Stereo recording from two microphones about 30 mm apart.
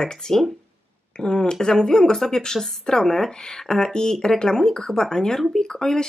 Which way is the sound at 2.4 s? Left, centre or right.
Left.